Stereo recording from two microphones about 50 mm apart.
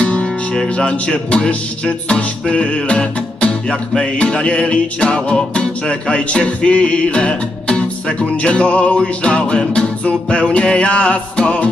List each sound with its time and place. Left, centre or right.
0.0 s music: left